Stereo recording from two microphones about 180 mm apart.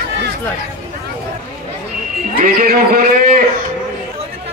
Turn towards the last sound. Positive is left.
turn(degrees=-50)  # may be behind; listen again after turning